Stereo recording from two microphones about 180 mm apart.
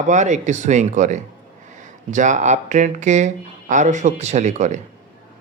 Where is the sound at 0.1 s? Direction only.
40° right (ahead or behind).